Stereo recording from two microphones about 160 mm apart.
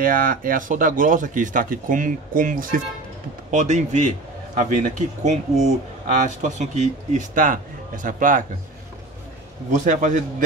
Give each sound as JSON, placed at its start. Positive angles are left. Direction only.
{"t": 0.0, "sound": "a man's voice", "side_deg": -60}
{"t": 5.2, "sound": "a man's voice", "side_deg": -45}
{"t": 9.7, "sound": "a man's voice", "side_deg": -50}